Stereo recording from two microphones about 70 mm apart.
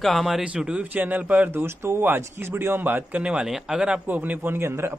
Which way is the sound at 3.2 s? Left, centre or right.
Centre.